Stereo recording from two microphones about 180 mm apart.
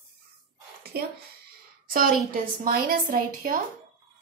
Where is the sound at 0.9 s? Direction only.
60° right (ahead or behind).